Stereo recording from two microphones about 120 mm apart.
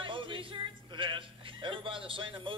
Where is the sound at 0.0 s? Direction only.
45° right (ahead or behind).